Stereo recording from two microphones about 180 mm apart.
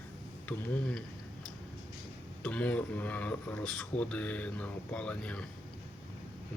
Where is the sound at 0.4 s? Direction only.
10° left (ahead or behind).